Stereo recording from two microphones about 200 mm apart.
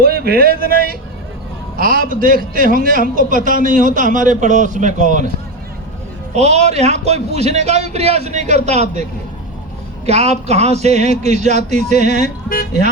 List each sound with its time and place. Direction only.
0.0 s a man's voice: 50° right (ahead or behind)
6.3 s a man's voice: 35° right (ahead or behind)
10.1 s a man's voice: 30° right (ahead or behind)
12.5 s speech: 45° left (ahead or behind)